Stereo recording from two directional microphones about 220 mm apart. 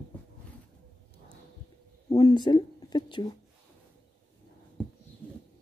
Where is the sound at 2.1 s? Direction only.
25° left (ahead or behind).